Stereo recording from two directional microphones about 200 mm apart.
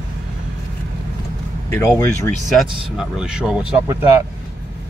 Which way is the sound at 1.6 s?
15° left (ahead or behind).